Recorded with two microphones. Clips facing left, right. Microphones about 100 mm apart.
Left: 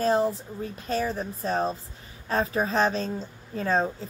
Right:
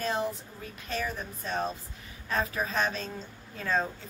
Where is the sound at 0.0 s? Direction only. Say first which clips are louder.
Left 8 dB; 35° left (ahead or behind).